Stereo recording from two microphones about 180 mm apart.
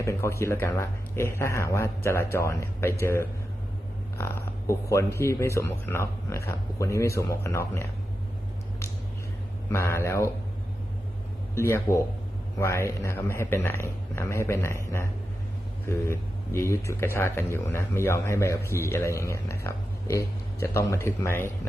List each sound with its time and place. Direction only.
0.0 s speech: 15° left (ahead or behind)
9.6 s speech: 15° left (ahead or behind)
11.5 s speech: 15° left (ahead or behind)